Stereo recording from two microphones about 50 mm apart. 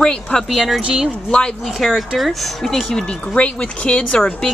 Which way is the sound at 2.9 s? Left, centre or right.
Centre.